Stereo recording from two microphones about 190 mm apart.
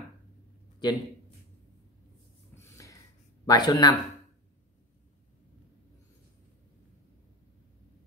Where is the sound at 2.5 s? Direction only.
15° left (ahead or behind).